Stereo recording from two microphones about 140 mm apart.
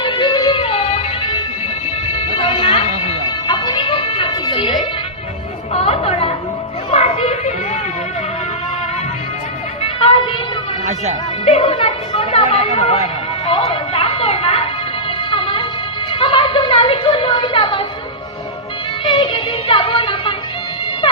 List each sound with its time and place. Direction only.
0.0 s music: 35° left (ahead or behind)
3.4 s music: 30° left (ahead or behind)
5.7 s chatter: 45° left (ahead or behind)
6.9 s children playing: 45° left (ahead or behind)
11.4 s chatter: 45° left (ahead or behind)
13.5 s music: 40° left (ahead or behind)
16.1 s a sound: 40° left (ahead or behind)
19.0 s music: 35° left (ahead or behind)